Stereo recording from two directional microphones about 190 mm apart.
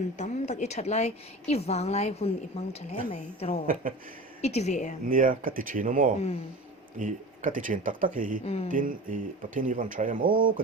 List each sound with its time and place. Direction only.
0.2 s a woman's voice: 35° left (ahead or behind)
5.0 s speech: 45° right (ahead or behind)
8.4 s a woman's voice: 30° left (ahead or behind)
8.7 s speech: 45° right (ahead or behind)